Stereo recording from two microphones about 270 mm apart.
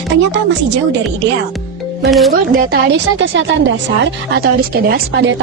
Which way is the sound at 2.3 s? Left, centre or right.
Right.